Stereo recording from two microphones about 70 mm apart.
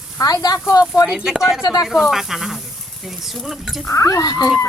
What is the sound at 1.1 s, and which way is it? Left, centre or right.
Speech, centre.